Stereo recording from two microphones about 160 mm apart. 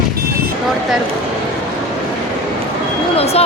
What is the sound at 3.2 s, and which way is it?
Speech, 40° left (ahead or behind).